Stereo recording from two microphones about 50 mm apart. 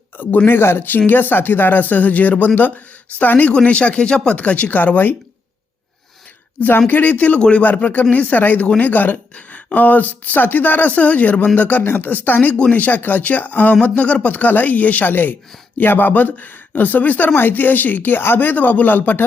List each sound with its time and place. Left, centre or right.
0.4 s a woman's voice: left
3.5 s speech: left
4.4 s a woman's voice: left
6.6 s a woman's voice: left